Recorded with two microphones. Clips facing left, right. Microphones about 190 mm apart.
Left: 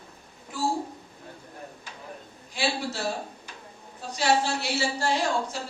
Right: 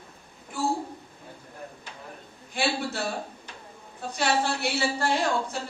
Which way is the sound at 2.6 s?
55° right (ahead or behind).